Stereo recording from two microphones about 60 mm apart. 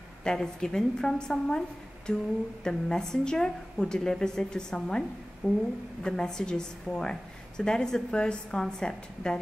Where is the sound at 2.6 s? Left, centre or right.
Centre.